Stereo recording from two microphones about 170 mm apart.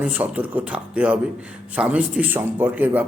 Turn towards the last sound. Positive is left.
turn(degrees=-10)  # may be behind; listen again after turning